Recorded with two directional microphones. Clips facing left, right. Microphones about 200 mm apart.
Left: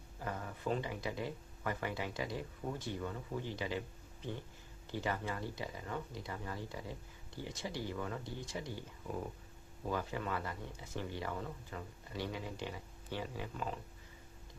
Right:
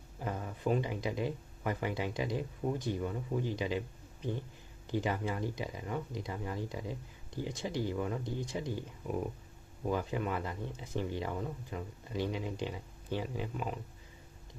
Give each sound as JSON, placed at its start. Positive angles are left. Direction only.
{"t": 0.2, "sound": "speech", "side_deg": -20}